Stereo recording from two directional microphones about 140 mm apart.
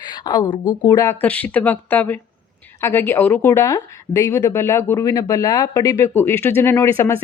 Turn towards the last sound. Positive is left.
turn(degrees=20)  # may be behind; listen again after turning